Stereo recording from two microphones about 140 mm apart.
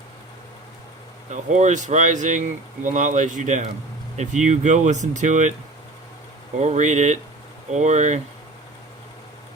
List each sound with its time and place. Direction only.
1.3 s speech: 60° right (ahead or behind)
6.6 s speech: 60° right (ahead or behind)